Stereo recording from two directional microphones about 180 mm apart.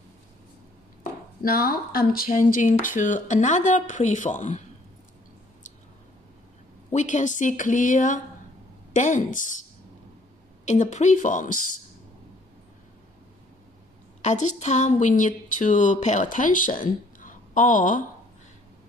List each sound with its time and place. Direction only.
1.4 s speech: 55° left (ahead or behind)
6.9 s speech: 40° left (ahead or behind)
10.7 s speech: 40° left (ahead or behind)
14.2 s speech: 40° left (ahead or behind)